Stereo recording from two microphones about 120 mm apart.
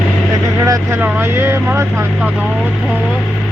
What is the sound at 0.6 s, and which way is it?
Vehicle, 30° right (ahead or behind).